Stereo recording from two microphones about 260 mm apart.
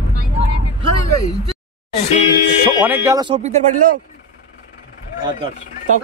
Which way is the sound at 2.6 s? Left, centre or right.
Centre.